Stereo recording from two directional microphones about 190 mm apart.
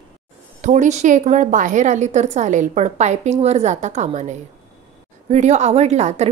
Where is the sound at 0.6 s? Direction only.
40° right (ahead or behind).